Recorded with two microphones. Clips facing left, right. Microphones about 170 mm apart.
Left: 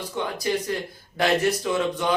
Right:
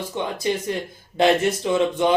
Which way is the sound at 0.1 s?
20° right (ahead or behind).